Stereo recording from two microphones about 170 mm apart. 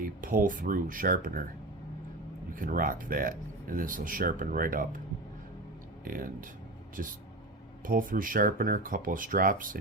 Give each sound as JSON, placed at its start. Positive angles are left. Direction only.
{"t": 0.0, "sound": "speech", "side_deg": -55}
{"t": 2.6, "sound": "speech", "side_deg": -55}
{"t": 7.0, "sound": "speech", "side_deg": -55}